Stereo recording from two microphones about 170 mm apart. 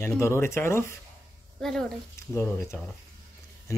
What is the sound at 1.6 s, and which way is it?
Speech, centre (ahead or behind).